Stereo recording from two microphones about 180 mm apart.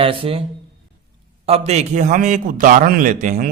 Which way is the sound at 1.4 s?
35° right (ahead or behind).